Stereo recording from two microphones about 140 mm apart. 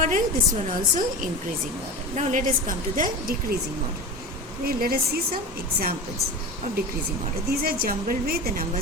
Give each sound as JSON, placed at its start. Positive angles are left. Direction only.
{"t": 0.0, "sound": "a woman's voice", "side_deg": -70}
{"t": 4.6, "sound": "a woman's voice", "side_deg": -90}
{"t": 7.5, "sound": "a woman's voice", "side_deg": -90}